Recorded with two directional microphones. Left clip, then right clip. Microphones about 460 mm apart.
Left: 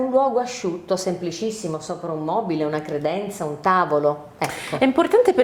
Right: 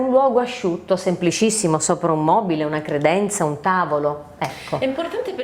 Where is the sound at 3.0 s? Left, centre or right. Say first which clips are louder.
Right 6 dB; right.